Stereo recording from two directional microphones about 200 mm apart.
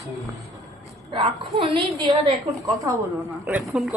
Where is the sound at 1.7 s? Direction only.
20° right (ahead or behind).